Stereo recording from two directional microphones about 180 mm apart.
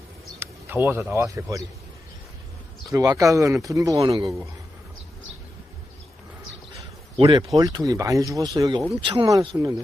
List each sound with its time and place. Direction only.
0.3 s speech: 10° right (ahead or behind)
2.9 s speech: 15° right (ahead or behind)
7.2 s speech: 30° right (ahead or behind)
7.5 s speech: 20° right (ahead or behind)
9.2 s speech: 20° right (ahead or behind)